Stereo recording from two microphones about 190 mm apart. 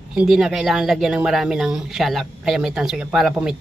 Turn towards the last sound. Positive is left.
turn(degrees=-5)  # may be behind; listen again after turning